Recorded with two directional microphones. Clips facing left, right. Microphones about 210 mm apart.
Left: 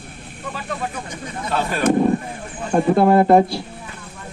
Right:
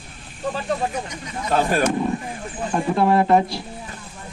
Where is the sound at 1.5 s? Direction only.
50° right (ahead or behind).